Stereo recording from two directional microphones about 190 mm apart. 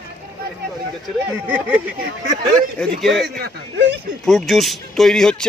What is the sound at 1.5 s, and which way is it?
Speech, 10° right (ahead or behind).